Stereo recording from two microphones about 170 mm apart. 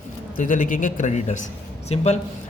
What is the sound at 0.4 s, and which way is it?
A man's voice, 50° left (ahead or behind).